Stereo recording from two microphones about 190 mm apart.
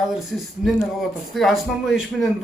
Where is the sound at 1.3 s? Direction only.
Centre (ahead or behind).